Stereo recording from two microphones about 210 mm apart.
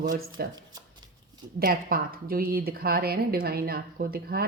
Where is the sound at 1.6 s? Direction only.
45° right (ahead or behind).